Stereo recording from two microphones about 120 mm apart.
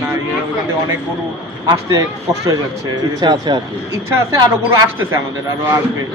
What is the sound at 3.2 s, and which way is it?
Speech, 40° right (ahead or behind).